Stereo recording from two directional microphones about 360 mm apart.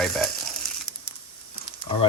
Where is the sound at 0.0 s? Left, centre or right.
Centre.